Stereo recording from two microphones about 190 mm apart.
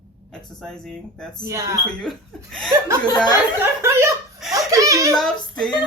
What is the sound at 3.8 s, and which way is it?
Chuckle, 15° right (ahead or behind).